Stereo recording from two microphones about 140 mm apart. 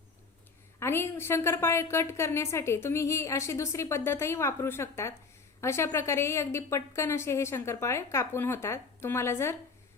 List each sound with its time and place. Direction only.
0.8 s a woman's voice: 20° left (ahead or behind)